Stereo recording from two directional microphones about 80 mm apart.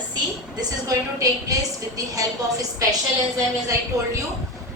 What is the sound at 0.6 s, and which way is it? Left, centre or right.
A woman's voice, right.